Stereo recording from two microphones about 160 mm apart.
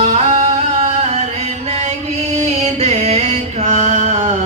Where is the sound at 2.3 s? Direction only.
40° right (ahead or behind).